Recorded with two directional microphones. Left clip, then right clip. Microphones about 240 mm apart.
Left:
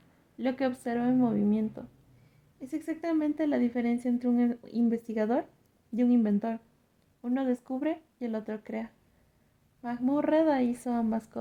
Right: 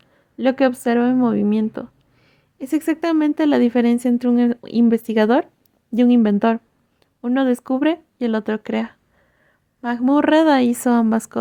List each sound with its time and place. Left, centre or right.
0.3 s a woman's voice: right